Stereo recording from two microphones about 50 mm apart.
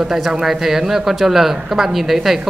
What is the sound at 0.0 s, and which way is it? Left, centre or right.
Speech, centre.